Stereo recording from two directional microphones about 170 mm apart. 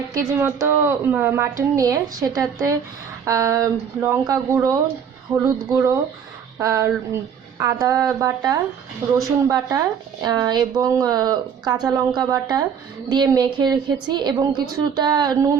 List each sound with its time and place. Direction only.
0.1 s a woman's voice: 15° right (ahead or behind)